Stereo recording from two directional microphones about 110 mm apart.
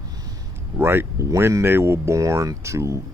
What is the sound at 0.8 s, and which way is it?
Speech, 20° right (ahead or behind).